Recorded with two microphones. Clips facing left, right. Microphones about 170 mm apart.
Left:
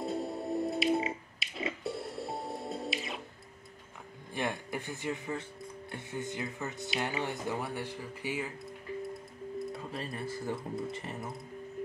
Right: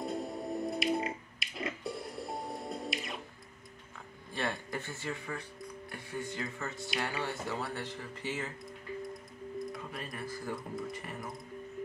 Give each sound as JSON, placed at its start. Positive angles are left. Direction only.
{"t": 0.0, "sound": "music", "side_deg": 0}
{"t": 4.3, "sound": "speech", "side_deg": 15}
{"t": 9.7, "sound": "speech", "side_deg": 25}